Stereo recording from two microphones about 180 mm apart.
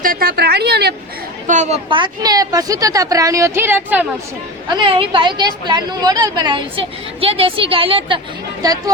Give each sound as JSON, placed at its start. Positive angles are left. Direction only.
{"t": 0.0, "sound": "a woman's voice", "side_deg": -55}
{"t": 1.5, "sound": "a woman's voice", "side_deg": -40}
{"t": 4.7, "sound": "a woman's voice", "side_deg": -30}